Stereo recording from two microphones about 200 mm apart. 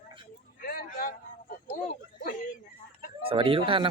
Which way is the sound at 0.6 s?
50° left (ahead or behind).